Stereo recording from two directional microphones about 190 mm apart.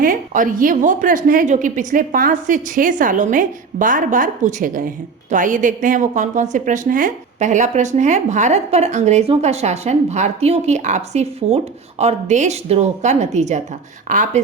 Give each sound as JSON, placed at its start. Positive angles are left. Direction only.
{"t": 0.0, "sound": "a woman's voice", "side_deg": -45}